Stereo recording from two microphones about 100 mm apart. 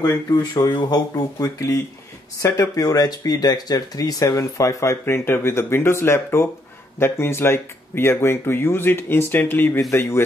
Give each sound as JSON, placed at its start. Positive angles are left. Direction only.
{"t": 0.4, "sound": "speech", "side_deg": 45}